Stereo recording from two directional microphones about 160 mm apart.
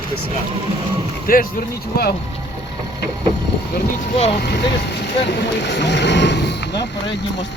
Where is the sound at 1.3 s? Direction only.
65° left (ahead or behind).